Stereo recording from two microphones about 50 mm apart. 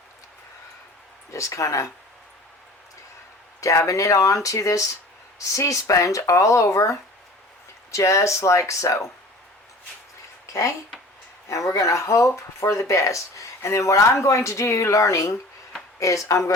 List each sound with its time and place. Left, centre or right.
1.3 s speech: left
3.6 s speech: left
10.4 s speech: left